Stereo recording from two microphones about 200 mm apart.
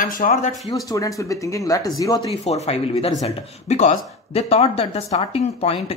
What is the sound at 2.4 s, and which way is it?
Speech, 30° left (ahead or behind).